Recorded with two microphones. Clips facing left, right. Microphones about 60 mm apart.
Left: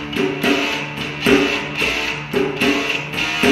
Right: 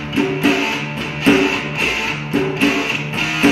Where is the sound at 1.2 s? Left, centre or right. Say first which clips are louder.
Right 1 dB; centre.